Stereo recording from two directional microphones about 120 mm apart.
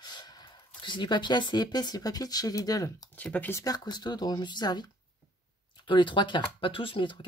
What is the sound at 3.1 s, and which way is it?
Speech, 10° left (ahead or behind).